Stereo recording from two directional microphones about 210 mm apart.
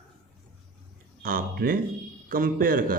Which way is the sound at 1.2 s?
45° right (ahead or behind).